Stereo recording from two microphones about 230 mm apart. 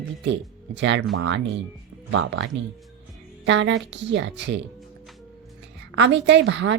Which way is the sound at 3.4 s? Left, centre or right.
Right.